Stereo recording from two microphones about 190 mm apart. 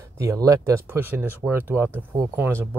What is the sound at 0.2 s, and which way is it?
Speech, 15° right (ahead or behind).